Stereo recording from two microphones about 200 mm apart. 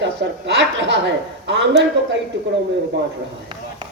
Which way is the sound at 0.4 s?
60° right (ahead or behind).